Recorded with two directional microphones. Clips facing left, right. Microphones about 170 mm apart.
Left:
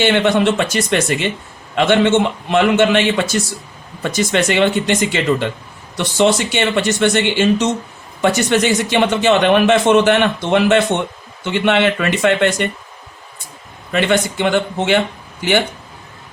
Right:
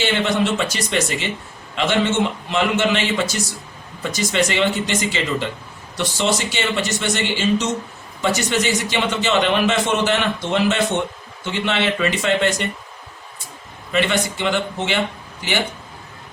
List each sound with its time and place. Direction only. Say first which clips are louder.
0.0 s speech: left 6 dB; 55° left (ahead or behind)
13.9 s speech: left 4 dB; 55° left (ahead or behind)